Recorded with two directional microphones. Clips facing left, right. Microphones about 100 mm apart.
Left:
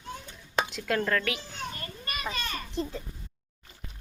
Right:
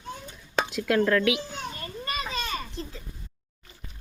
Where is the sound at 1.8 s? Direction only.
25° right (ahead or behind).